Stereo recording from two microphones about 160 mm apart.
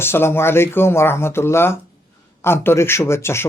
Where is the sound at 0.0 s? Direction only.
15° left (ahead or behind).